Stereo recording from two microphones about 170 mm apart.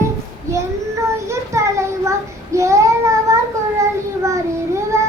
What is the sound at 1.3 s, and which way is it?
Child singing, 15° right (ahead or behind).